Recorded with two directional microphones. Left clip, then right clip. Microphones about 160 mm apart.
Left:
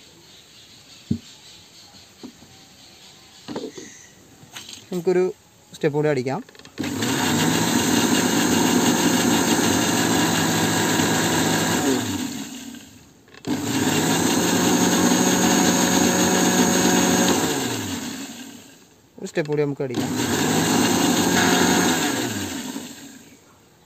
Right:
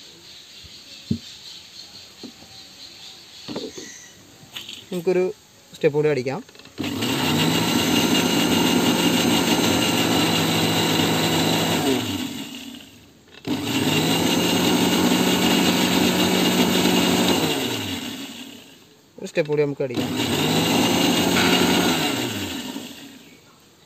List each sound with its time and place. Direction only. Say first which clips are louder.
5.0 s speech: left 1 dB; 40° left (ahead or behind)
6.8 s engine: even; 5° left (ahead or behind)
13.5 s wood: even; centre (ahead or behind)
15.9 s a sound: left 1 dB; centre (ahead or behind)
19.2 s speech: right 2 dB; 50° left (ahead or behind)
20.2 s a sound: even; 5° left (ahead or behind)